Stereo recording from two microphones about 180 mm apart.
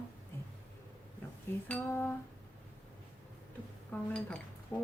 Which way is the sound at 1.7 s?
10° left (ahead or behind).